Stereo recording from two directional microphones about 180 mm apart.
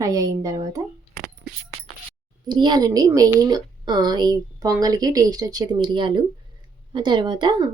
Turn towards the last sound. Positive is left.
turn(degrees=-25)  # may be behind; listen again after turning